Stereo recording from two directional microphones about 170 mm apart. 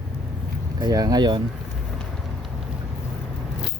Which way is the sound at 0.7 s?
25° right (ahead or behind).